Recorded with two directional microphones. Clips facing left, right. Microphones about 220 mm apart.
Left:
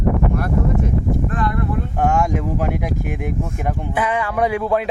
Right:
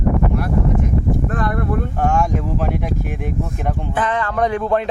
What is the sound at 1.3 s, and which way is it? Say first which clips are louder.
Speech: right 1 dB; 50° right (ahead or behind).